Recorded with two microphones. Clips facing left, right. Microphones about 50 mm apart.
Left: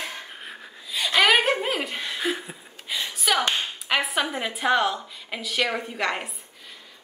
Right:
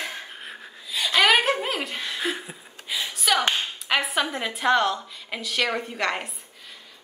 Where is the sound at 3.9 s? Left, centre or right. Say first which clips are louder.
Even; centre.